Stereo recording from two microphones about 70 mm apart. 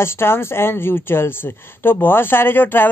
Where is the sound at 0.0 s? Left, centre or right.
Left.